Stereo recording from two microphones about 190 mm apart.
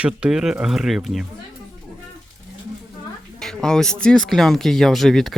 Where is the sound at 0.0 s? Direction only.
5° right (ahead or behind).